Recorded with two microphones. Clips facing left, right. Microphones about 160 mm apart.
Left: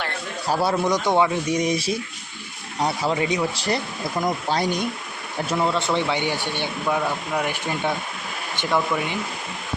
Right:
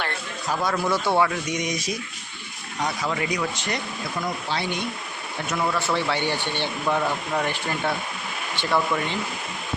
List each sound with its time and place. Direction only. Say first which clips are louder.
0.4 s speech: left 3 dB; 35° left (ahead or behind); by 1.4 s 20° left (ahead or behind)
1.5 s speech: left 5 dB; 30° left (ahead or behind)
4.2 s speech: left 6 dB; 40° left (ahead or behind)
5.5 s speech: left 2 dB; 25° left (ahead or behind)
6.8 s speech: even; centre (ahead or behind)
7.5 s speech: left 1 dB; 15° left (ahead or behind)